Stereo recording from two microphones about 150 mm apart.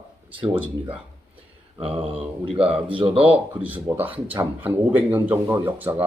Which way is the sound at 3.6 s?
10° right (ahead or behind).